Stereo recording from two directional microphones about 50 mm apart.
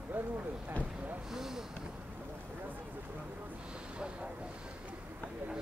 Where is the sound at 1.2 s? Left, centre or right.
Centre.